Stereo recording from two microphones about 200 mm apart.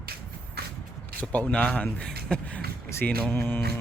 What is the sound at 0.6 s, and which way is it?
Shuffle, 55° right (ahead or behind).